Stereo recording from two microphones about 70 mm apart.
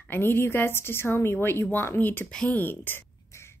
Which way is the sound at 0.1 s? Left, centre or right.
Left.